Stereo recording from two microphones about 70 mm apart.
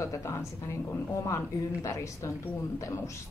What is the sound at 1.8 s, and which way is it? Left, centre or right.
A woman's voice, left.